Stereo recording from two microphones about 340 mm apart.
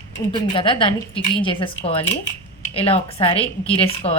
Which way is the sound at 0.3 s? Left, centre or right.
Centre.